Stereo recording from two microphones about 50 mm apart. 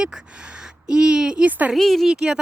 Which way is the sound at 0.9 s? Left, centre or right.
Centre.